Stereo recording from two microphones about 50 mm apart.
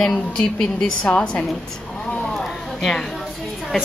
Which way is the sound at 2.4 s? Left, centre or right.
Centre.